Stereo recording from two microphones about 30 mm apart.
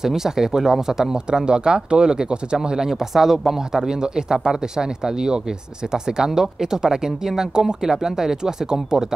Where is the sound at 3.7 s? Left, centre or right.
Centre.